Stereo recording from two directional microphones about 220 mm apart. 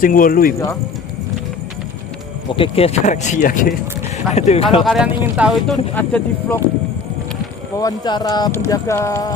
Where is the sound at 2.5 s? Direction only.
25° left (ahead or behind).